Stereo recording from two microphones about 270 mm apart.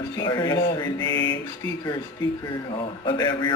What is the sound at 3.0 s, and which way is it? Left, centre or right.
Mantra, centre.